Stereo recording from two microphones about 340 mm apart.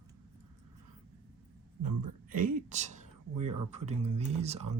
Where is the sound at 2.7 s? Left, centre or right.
Right.